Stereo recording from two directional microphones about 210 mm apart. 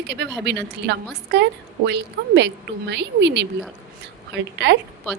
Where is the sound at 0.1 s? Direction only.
55° right (ahead or behind).